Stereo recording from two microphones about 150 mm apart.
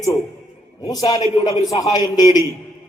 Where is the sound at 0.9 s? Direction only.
25° left (ahead or behind).